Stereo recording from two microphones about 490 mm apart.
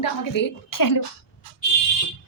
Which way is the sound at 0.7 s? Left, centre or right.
Left.